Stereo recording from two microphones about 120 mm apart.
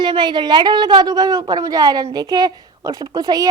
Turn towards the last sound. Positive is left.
turn(degrees=-35)  # may be behind; listen again after turning